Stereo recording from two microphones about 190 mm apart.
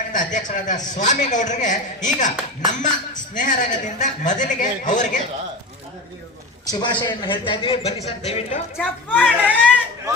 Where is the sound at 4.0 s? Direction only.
40° left (ahead or behind).